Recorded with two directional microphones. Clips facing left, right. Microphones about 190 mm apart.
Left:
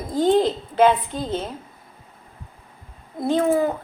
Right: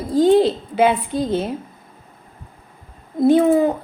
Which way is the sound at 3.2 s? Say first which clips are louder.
Right 6 dB; 15° right (ahead or behind).